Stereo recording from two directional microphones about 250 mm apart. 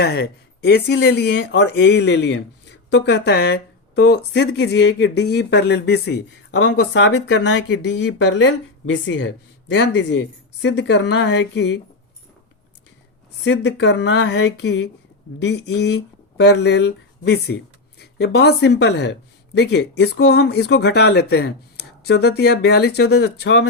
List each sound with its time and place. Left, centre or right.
0.0 s speech: left
13.4 s speech: left